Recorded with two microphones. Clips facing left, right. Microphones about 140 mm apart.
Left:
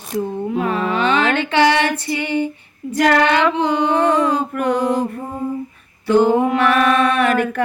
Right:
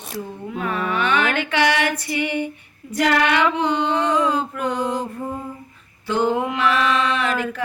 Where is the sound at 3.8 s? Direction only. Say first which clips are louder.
Left 6 dB; 55° left (ahead or behind).